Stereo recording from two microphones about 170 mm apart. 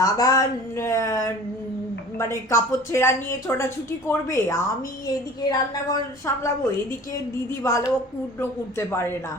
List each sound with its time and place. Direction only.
0.0 s a woman's voice: 20° left (ahead or behind)